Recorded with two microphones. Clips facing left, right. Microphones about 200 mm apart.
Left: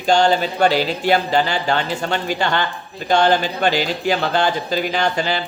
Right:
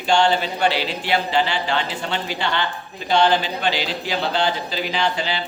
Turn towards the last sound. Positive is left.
turn(degrees=45)  # may be behind; listen again after turning